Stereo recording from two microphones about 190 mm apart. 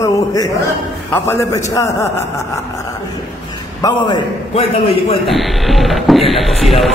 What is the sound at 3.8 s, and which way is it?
Speech, 20° left (ahead or behind).